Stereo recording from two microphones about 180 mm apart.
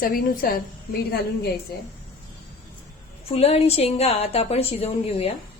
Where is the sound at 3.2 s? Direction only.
35° left (ahead or behind).